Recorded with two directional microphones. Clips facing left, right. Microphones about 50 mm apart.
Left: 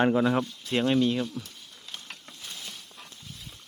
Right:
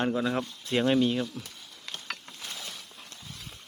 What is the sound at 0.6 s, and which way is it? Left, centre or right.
Speech, centre.